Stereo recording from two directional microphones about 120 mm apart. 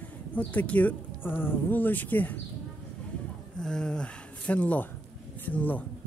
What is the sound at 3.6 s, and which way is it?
Speech, 5° left (ahead or behind).